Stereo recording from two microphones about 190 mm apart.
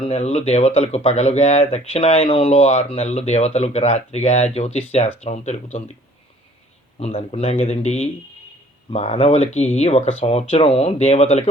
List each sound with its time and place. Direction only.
0.0 s speech: 30° left (ahead or behind)
7.0 s speech: 35° left (ahead or behind)